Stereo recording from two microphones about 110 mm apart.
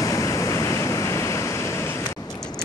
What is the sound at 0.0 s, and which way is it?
Waves, 30° left (ahead or behind).